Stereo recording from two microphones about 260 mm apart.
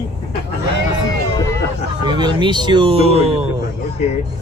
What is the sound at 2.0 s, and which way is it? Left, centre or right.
Speech, centre.